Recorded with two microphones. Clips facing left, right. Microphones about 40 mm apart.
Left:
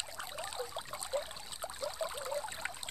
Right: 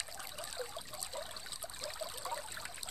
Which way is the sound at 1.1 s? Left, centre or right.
Left.